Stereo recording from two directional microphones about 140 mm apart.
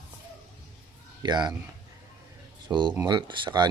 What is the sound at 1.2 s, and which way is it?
Speech, 30° right (ahead or behind).